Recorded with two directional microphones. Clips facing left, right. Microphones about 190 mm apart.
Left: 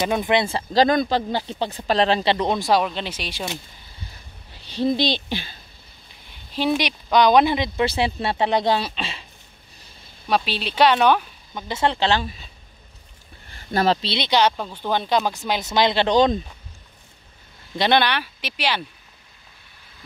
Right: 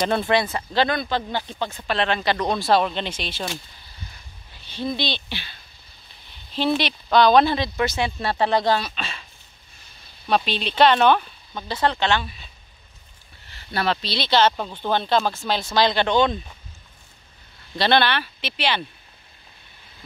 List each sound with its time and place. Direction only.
0.0 s speech: 15° left (ahead or behind); by 2.3 s 35° left (ahead or behind)
2.3 s speech: 15° left (ahead or behind)
2.8 s speech: 5° left (ahead or behind)
4.6 s speech: 35° left (ahead or behind)
6.5 s speech: 10° left (ahead or behind)
7.8 s speech: 30° left (ahead or behind)
10.2 s speech: 5° left (ahead or behind); by 12.4 s 35° left (ahead or behind)
13.5 s a sound: 45° left (ahead or behind)
14.0 s speech: 20° left (ahead or behind); by 16.3 s 35° left (ahead or behind)
17.7 s speech: 15° left (ahead or behind)